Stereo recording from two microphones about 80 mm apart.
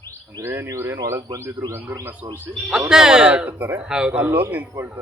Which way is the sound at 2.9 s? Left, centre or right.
Centre.